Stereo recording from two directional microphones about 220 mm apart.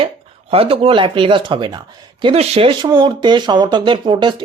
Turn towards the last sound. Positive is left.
turn(degrees=-20)  # may be behind; listen again after turning